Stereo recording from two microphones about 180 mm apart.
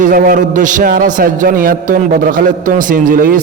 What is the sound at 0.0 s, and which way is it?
A man's voice, 50° right (ahead or behind).